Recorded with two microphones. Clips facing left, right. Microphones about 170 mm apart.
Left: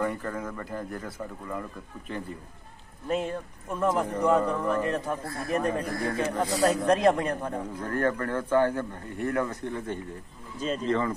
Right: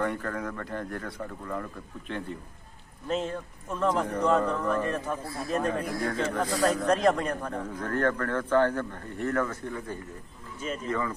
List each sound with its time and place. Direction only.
0.2 s a man's voice: 5° left (ahead or behind)
5.8 s a man's voice: 10° right (ahead or behind)
6.1 s a man's voice: 10° left (ahead or behind); by 11.1 s 30° left (ahead or behind)